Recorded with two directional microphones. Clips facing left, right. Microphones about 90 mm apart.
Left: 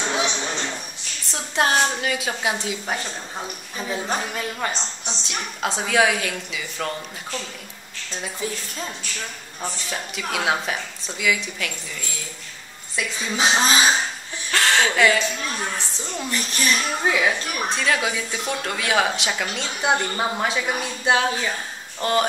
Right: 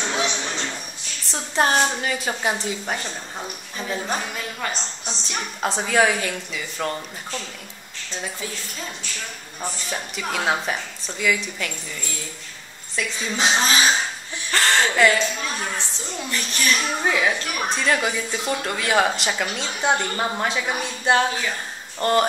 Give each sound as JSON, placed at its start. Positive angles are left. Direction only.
{"t": 1.3, "sound": "a woman's voice", "side_deg": 0}
{"t": 4.4, "sound": "speech", "side_deg": 15}
{"t": 5.0, "sound": "a woman's voice", "side_deg": 0}
{"t": 9.6, "sound": "a woman's voice", "side_deg": 0}
{"t": 12.9, "sound": "a woman's voice", "side_deg": 5}
{"t": 13.7, "sound": "speech", "side_deg": 25}
{"t": 14.5, "sound": "chuckle", "side_deg": 0}
{"t": 16.3, "sound": "speech", "side_deg": 15}
{"t": 16.7, "sound": "a woman's voice", "side_deg": 0}